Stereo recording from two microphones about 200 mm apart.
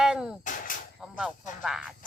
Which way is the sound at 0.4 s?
40° left (ahead or behind).